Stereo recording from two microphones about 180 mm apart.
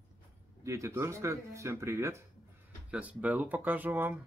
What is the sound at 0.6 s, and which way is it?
Speech, 15° right (ahead or behind).